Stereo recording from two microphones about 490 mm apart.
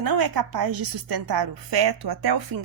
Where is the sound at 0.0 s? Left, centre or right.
Right.